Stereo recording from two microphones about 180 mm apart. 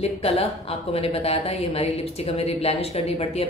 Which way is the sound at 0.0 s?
35° left (ahead or behind).